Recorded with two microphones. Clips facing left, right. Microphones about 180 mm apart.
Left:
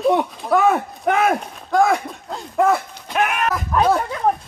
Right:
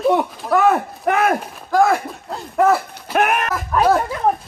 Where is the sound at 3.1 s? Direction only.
50° right (ahead or behind).